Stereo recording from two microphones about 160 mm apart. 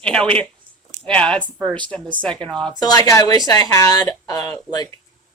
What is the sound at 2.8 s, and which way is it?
Speech, 20° left (ahead or behind).